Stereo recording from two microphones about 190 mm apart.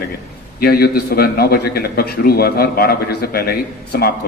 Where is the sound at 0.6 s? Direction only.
55° left (ahead or behind).